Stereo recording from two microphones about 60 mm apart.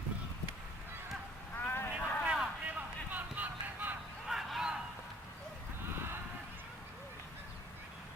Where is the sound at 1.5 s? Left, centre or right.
Left.